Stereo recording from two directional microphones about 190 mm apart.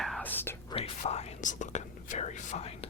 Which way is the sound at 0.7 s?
30° left (ahead or behind).